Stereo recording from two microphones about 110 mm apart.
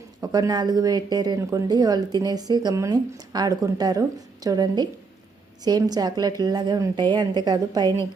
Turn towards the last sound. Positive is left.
turn(degrees=-35)  # may be behind; listen again after turning